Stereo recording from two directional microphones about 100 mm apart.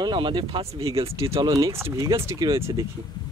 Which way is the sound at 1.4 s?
35° right (ahead or behind).